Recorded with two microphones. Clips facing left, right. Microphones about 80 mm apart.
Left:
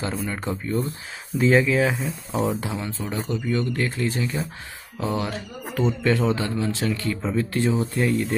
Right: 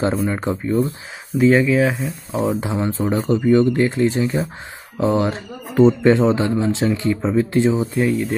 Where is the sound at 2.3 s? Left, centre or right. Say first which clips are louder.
Right 5 dB; right.